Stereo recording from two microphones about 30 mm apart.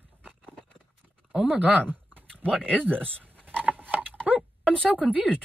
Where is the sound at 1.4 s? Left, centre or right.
Right.